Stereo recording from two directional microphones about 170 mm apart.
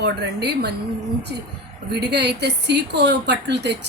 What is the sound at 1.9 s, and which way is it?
A woman's voice, 75° right (ahead or behind).